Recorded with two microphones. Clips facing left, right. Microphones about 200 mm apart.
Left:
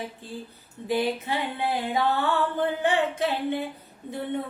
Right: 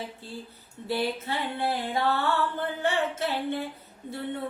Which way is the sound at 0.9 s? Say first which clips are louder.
Left 3 dB; 15° left (ahead or behind).